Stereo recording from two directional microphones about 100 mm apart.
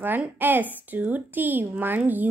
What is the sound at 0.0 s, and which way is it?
Speech, 20° right (ahead or behind).